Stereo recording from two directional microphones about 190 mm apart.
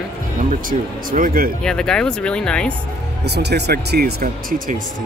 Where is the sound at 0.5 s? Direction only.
45° right (ahead or behind).